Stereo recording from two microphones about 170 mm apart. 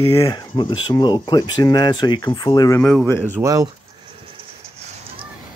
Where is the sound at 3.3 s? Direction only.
20° right (ahead or behind).